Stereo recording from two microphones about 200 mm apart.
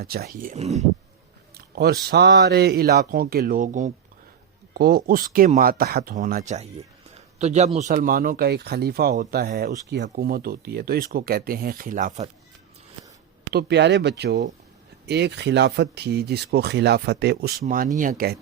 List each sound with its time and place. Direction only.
0.0 s speech: 50° right (ahead or behind); by 0.9 s 35° right (ahead or behind)
1.5 s speech: 50° right (ahead or behind)
13.5 s speech: 55° right (ahead or behind)
17.7 s speech: 40° right (ahead or behind)